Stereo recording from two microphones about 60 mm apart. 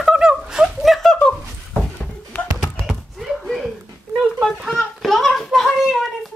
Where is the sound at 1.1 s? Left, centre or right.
Centre.